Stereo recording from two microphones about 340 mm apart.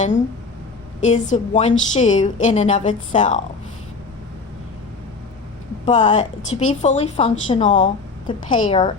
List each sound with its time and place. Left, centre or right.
1.0 s a woman's voice: left
5.8 s a woman's voice: left